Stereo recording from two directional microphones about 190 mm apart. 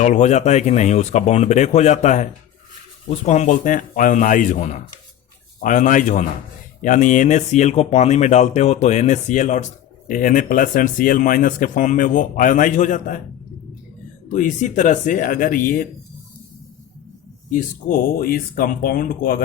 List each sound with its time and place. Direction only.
0.0 s speech: 40° left (ahead or behind)
14.3 s speech: 40° left (ahead or behind)
17.5 s speech: 45° left (ahead or behind)